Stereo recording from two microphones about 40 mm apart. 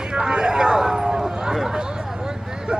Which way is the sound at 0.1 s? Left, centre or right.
Right.